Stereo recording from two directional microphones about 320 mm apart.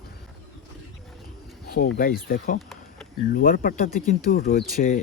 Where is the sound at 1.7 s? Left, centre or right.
Left.